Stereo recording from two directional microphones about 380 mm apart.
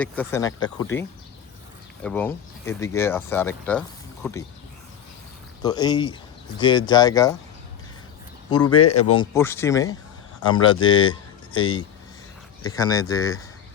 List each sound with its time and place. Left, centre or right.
0.0 s speech: centre
2.0 s speech: centre
5.6 s speech: centre
8.8 s speech: left
9.3 s speech: centre